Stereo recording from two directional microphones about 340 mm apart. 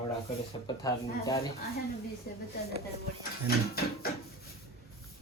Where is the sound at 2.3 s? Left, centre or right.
Left.